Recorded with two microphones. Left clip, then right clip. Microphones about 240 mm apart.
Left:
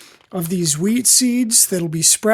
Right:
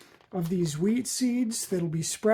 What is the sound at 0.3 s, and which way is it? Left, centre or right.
Speech, left.